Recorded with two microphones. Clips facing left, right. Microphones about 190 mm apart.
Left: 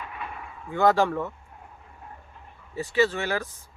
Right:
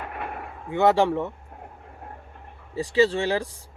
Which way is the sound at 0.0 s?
60° right (ahead or behind).